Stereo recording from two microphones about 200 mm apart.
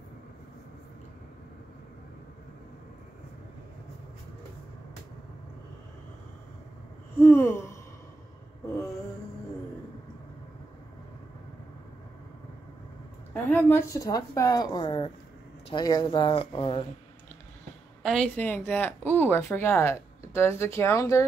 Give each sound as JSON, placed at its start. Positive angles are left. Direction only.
{"t": 7.2, "sound": "a sound", "side_deg": 10}
{"t": 13.3, "sound": "speech", "side_deg": 10}
{"t": 18.0, "sound": "speech", "side_deg": 5}